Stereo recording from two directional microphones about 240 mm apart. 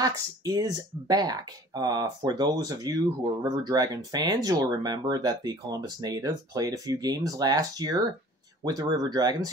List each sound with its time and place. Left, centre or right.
0.0 s speech: centre